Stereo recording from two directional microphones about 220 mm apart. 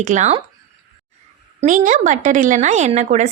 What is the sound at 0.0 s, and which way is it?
Speech, 35° right (ahead or behind).